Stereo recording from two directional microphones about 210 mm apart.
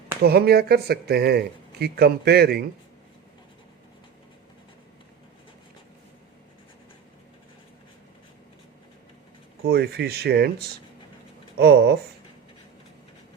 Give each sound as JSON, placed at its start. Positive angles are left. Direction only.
{"t": 0.2, "sound": "speech", "side_deg": -50}
{"t": 9.6, "sound": "speech", "side_deg": -50}